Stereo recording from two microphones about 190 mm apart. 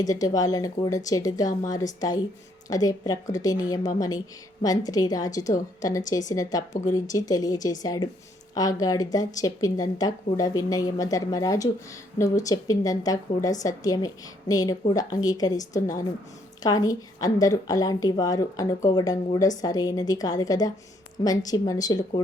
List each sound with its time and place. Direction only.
0.0 s a woman's voice: 20° left (ahead or behind)